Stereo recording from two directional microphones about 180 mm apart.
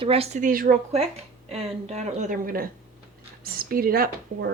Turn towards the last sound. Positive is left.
turn(degrees=-55)  # may be behind; listen again after turning